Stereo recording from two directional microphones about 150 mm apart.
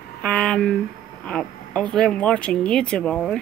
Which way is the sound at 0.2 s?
5° left (ahead or behind).